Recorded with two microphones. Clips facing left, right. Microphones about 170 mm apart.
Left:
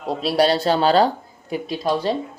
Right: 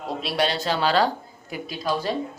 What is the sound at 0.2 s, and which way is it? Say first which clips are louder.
Speech: left 7 dB; 35° left (ahead or behind).